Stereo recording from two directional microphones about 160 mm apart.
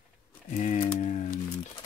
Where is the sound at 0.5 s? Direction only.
50° left (ahead or behind).